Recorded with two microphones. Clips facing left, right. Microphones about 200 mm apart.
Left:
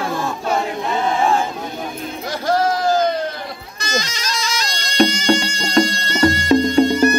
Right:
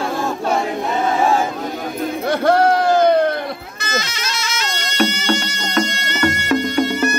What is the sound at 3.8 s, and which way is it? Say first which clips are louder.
Music: left 1 dB; 35° left (ahead or behind).